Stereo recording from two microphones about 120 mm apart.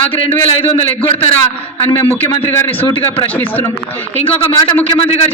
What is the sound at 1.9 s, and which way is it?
A man's voice, 20° left (ahead or behind).